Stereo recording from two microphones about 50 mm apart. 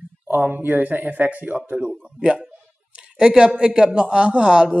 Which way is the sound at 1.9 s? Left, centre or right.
Centre.